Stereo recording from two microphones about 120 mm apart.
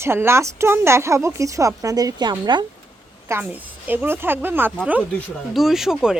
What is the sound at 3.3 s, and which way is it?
Speech, 15° right (ahead or behind).